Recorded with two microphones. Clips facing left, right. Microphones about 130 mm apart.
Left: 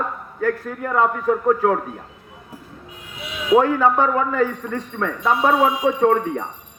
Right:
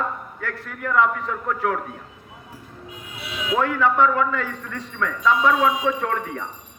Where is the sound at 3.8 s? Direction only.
45° left (ahead or behind).